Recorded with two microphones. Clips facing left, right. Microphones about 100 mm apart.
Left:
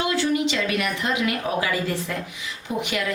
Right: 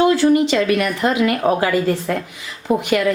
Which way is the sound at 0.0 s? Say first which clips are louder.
Right 9 dB; 40° right (ahead or behind).